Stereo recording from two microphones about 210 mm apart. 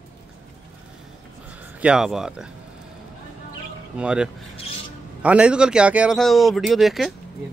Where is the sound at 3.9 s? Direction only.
5° right (ahead or behind).